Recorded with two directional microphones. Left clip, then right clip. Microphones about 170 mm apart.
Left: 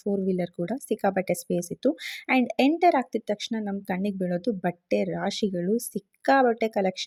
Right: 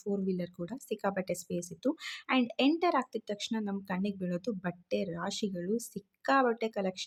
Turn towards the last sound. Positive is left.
turn(degrees=30)  # may be behind; listen again after turning